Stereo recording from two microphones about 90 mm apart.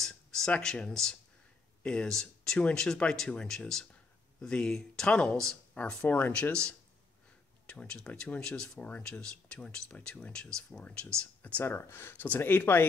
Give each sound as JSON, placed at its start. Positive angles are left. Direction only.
{"t": 0.0, "sound": "a sound", "side_deg": 5}
{"t": 1.8, "sound": "speech", "side_deg": 10}
{"t": 6.0, "sound": "speech", "side_deg": 20}